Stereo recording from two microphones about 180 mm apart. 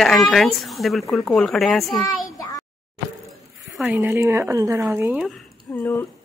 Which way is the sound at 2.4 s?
20° left (ahead or behind).